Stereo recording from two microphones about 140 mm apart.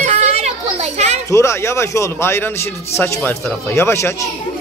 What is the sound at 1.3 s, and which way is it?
Speech, 20° left (ahead or behind).